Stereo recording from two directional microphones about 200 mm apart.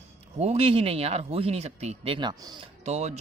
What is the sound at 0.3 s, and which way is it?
A man's voice, 30° right (ahead or behind).